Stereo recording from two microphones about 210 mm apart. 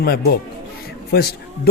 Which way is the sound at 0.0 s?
45° left (ahead or behind).